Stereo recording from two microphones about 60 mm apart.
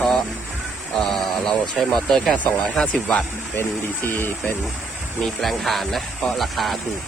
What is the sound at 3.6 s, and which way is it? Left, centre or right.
Speech, left.